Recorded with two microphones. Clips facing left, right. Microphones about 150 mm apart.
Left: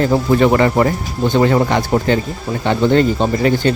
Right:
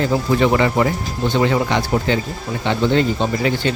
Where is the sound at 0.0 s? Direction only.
50° left (ahead or behind).